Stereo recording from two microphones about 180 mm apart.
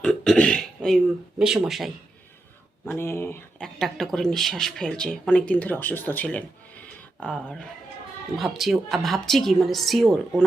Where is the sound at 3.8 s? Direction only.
Centre (ahead or behind).